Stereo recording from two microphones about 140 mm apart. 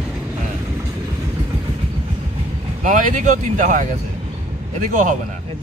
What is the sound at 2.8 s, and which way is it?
Speech, 65° right (ahead or behind).